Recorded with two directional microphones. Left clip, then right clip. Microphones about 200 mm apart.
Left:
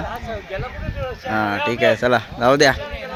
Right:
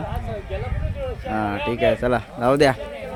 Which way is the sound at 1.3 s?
5° right (ahead or behind).